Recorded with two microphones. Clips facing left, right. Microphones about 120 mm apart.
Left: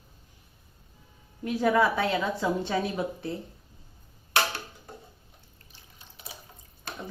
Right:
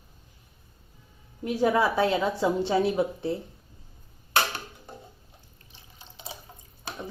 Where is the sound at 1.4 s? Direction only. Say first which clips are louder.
Even; 25° right (ahead or behind).